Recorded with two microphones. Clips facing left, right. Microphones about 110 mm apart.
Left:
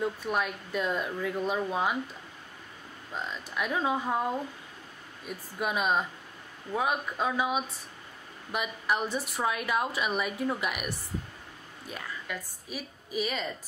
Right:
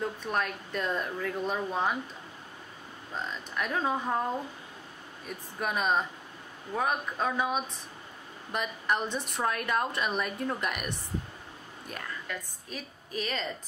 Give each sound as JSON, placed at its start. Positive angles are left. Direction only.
{"t": 0.0, "sound": "speech", "side_deg": 10}
{"t": 3.2, "sound": "speech", "side_deg": 10}
{"t": 5.6, "sound": "a woman's voice", "side_deg": 5}